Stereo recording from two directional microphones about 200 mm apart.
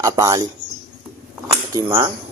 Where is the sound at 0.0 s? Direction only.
15° right (ahead or behind).